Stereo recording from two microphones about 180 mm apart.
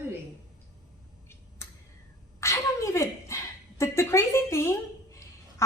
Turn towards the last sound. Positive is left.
turn(degrees=15)  # may be behind; listen again after turning